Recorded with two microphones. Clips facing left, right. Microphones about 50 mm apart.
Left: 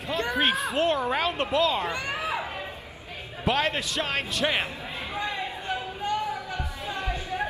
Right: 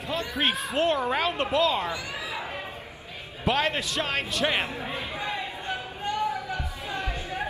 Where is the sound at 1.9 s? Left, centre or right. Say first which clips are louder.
Left 4 dB; left.